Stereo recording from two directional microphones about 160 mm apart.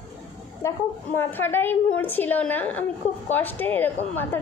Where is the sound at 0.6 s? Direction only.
15° left (ahead or behind).